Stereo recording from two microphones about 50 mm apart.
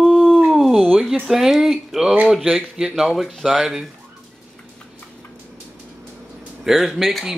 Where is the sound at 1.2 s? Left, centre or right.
Centre.